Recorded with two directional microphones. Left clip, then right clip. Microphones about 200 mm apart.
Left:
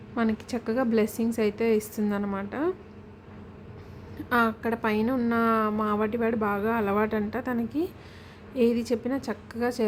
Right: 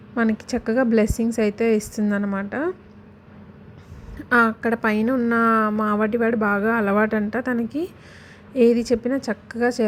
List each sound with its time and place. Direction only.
0.1 s a woman's voice: 15° right (ahead or behind)
4.3 s a woman's voice: 20° right (ahead or behind)